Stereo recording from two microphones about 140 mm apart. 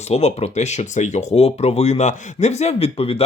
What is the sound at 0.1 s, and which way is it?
Speech, 50° left (ahead or behind).